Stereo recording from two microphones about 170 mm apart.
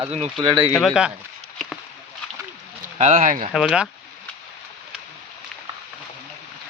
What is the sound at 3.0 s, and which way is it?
Speech, 45° right (ahead or behind).